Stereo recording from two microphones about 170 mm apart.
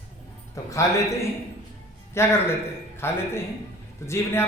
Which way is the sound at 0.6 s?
20° left (ahead or behind).